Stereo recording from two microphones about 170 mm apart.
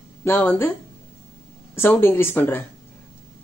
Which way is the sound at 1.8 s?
15° left (ahead or behind).